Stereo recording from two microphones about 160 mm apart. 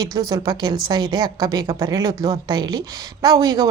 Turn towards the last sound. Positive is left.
turn(degrees=-25)  # may be behind; listen again after turning